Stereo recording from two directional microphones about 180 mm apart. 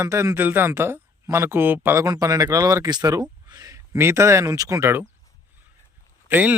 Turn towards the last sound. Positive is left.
turn(degrees=-10)  # may be behind; listen again after turning